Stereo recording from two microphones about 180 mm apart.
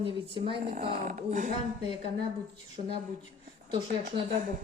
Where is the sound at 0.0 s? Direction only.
30° right (ahead or behind).